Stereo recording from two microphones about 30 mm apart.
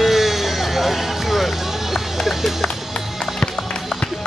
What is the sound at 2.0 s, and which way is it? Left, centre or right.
Run, centre.